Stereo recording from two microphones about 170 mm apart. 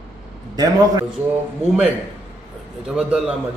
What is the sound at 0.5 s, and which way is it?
Speech, 20° right (ahead or behind).